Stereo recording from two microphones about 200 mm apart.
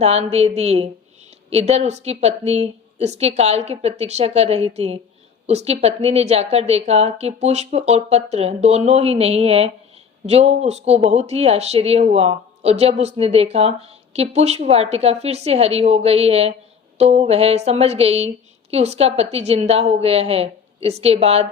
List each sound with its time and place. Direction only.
0.0 s speech: 30° right (ahead or behind)